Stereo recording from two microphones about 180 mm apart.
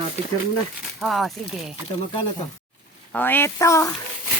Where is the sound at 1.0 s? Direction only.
Centre (ahead or behind).